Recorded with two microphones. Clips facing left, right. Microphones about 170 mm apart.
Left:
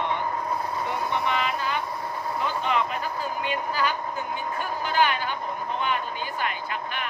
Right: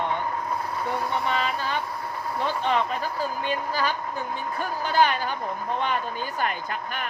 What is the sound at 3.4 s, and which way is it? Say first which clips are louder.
Speech: left 1 dB; 35° right (ahead or behind).